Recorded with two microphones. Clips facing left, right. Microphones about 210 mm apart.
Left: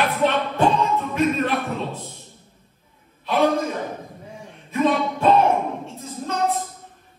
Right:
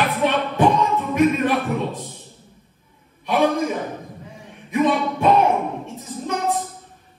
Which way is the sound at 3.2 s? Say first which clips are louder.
Right 1 dB; 15° right (ahead or behind).